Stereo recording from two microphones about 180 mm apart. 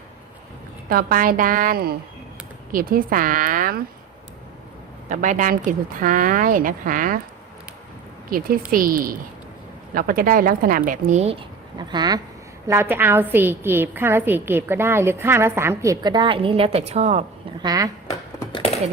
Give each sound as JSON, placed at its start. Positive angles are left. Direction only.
{"t": 0.9, "sound": "speech", "side_deg": -55}
{"t": 5.0, "sound": "speech", "side_deg": -45}
{"t": 8.7, "sound": "speech", "side_deg": -50}
{"t": 11.8, "sound": "a woman's voice", "side_deg": -25}
{"t": 17.6, "sound": "speech", "side_deg": -20}